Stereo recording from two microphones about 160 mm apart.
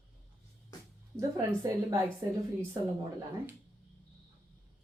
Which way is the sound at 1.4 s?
20° right (ahead or behind).